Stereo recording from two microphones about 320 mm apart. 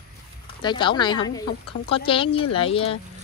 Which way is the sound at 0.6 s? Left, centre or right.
Centre.